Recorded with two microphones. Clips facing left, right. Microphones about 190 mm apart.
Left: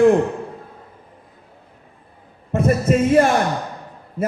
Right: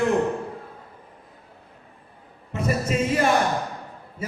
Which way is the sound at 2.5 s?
50° left (ahead or behind).